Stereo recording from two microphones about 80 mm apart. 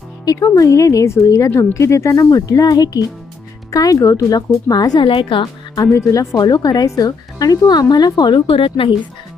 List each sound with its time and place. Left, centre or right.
0.5 s a woman's voice: left
4.9 s a woman's voice: left
5.8 s a woman's voice: left